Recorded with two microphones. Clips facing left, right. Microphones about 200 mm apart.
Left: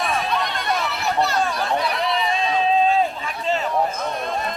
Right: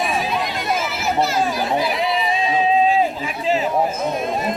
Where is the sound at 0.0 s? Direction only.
Centre (ahead or behind).